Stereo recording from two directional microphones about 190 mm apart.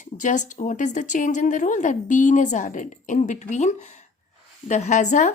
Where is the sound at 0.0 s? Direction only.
40° left (ahead or behind).